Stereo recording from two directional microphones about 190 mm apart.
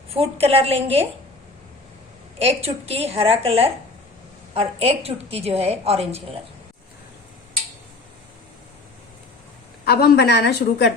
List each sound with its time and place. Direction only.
0.1 s a woman's voice: 30° right (ahead or behind)
2.4 s a woman's voice: 30° right (ahead or behind)
9.8 s a woman's voice: 55° left (ahead or behind)